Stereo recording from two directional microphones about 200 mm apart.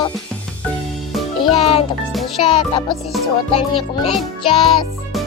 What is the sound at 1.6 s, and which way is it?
Speech, 30° left (ahead or behind).